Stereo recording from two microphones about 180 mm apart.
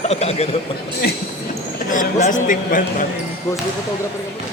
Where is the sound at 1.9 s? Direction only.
45° left (ahead or behind).